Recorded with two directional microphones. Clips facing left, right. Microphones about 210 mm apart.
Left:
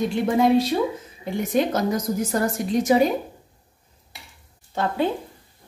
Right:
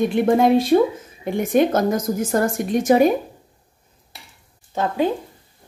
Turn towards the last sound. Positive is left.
turn(degrees=-15)  # may be behind; listen again after turning